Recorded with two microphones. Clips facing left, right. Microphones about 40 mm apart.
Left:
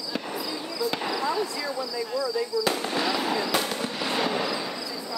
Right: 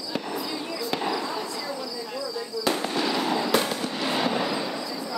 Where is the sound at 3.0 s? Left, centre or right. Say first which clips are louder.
Even; centre.